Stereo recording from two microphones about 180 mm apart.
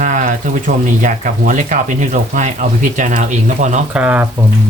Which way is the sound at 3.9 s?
5° right (ahead or behind).